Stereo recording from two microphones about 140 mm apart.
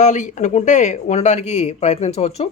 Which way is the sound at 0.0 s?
60° left (ahead or behind).